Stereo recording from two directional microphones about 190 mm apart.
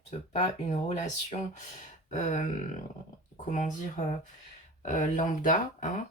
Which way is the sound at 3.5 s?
40° left (ahead or behind).